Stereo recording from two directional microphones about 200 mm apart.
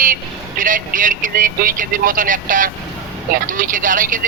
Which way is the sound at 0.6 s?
40° right (ahead or behind).